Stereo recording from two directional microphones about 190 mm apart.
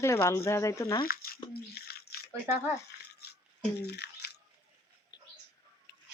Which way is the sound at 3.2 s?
55° left (ahead or behind).